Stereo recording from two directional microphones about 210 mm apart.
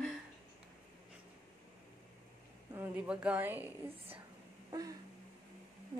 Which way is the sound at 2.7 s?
10° right (ahead or behind).